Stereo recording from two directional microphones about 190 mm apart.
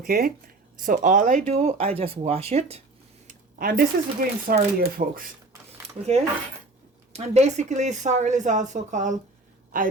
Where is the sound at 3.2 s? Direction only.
50° right (ahead or behind).